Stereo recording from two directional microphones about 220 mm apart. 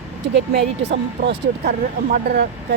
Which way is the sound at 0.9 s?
50° right (ahead or behind).